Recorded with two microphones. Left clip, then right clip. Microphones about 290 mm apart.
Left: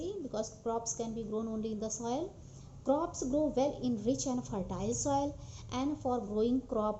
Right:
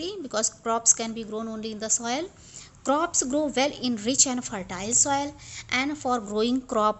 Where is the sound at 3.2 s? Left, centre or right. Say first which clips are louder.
Right 6 dB; right.